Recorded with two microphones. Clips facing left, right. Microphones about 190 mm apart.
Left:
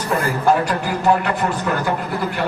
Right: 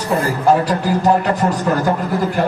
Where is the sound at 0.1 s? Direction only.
30° right (ahead or behind).